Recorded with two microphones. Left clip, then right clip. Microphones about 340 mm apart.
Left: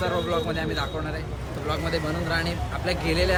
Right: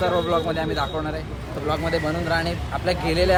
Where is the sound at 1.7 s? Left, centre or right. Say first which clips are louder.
Right 4 dB; centre.